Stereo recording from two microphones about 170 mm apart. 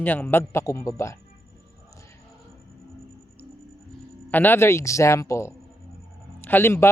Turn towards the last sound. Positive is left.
turn(degrees=15)  # may be behind; listen again after turning